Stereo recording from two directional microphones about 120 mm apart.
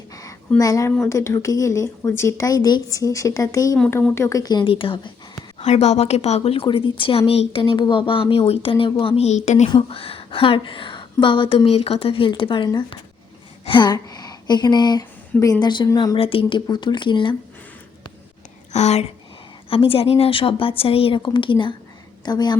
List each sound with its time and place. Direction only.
0.6 s speech: 30° left (ahead or behind); by 5.1 s 45° left (ahead or behind)
5.5 s a woman's voice: 65° left (ahead or behind)
9.6 s a woman's voice: 50° left (ahead or behind)
16.1 s speech: 50° left (ahead or behind)
18.7 s speech: 70° left (ahead or behind)
19.7 s a woman's voice: 50° left (ahead or behind)